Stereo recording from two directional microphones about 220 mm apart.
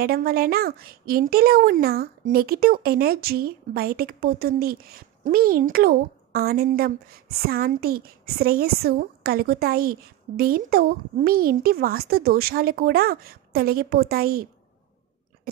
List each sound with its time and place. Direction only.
0.0 s a woman's voice: 45° right (ahead or behind)